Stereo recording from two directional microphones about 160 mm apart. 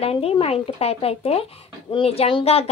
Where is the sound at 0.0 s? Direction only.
35° left (ahead or behind).